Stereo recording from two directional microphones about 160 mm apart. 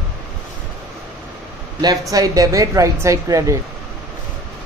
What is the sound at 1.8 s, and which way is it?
A woman's voice, 25° right (ahead or behind).